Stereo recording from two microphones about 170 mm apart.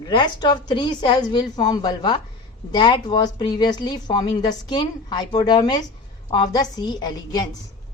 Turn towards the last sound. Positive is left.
turn(degrees=25)  # may be behind; listen again after turning